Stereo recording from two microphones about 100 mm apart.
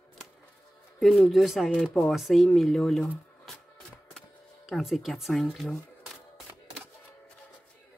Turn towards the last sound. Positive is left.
turn(degrees=0)  # may be behind; listen again after turning